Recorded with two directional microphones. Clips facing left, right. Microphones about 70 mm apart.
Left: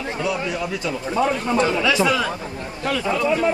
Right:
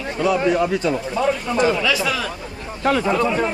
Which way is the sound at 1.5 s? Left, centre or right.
Centre.